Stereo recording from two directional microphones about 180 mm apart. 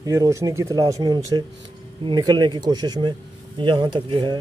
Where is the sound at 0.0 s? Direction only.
20° right (ahead or behind).